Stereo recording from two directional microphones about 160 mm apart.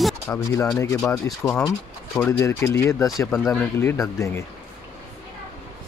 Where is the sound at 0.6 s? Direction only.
20° left (ahead or behind).